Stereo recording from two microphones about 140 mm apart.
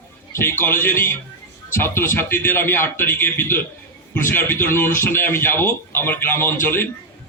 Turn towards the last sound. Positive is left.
turn(degrees=15)  # may be behind; listen again after turning